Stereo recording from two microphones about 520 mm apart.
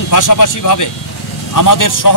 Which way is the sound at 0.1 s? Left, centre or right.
Left.